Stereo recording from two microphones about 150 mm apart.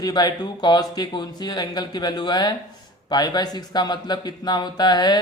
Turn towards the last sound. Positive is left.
turn(degrees=30)  # may be behind; listen again after turning